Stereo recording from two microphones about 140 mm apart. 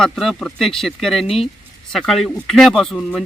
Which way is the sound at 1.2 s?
45° left (ahead or behind).